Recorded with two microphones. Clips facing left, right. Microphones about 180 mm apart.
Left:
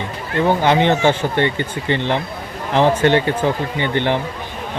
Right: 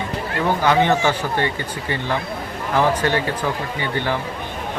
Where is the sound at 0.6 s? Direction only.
25° left (ahead or behind).